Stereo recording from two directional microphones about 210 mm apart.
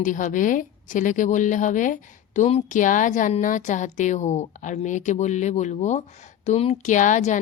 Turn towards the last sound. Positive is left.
turn(degrees=35)  # may be behind; listen again after turning